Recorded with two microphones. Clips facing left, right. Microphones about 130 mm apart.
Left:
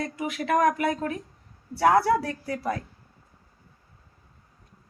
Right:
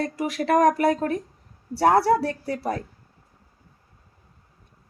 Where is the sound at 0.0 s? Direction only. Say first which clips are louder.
Right 4 dB; 35° right (ahead or behind).